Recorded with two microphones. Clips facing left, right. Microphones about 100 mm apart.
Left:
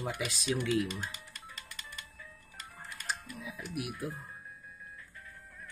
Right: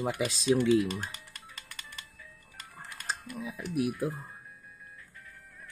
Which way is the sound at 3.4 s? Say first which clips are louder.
Right 8 dB; 35° right (ahead or behind).